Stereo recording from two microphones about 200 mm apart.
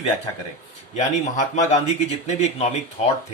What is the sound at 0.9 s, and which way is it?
Speech, 35° left (ahead or behind).